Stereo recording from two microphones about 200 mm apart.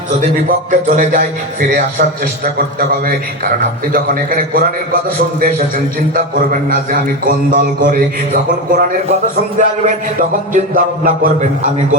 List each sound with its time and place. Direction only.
0.2 s a man's voice: 40° right (ahead or behind)